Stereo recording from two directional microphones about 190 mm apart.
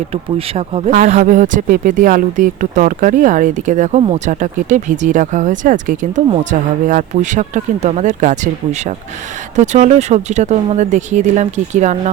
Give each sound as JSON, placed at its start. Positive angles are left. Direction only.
{"t": 0.1, "sound": "speech", "side_deg": -30}